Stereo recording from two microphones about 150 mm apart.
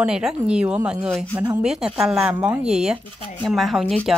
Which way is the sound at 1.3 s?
20° right (ahead or behind).